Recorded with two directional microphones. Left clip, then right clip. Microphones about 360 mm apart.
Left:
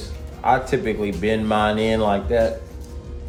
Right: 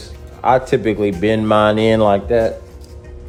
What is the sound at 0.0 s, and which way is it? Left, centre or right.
Speech, right.